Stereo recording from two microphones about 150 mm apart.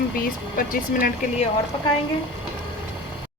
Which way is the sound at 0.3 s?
70° left (ahead or behind).